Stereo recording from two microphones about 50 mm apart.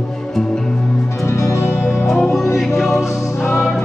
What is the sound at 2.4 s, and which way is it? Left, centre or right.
Music, left.